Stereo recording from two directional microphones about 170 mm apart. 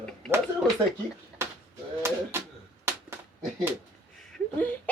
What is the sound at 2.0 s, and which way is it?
Speech, 15° right (ahead or behind).